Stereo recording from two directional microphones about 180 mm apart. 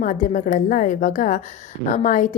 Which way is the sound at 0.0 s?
45° left (ahead or behind).